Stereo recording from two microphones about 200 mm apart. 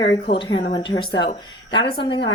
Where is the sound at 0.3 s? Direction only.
25° left (ahead or behind).